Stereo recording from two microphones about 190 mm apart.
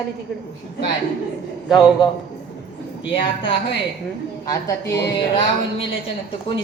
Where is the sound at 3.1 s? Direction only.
25° left (ahead or behind).